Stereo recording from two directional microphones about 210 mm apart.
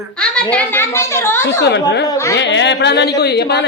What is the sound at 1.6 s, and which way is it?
Speech, 55° left (ahead or behind).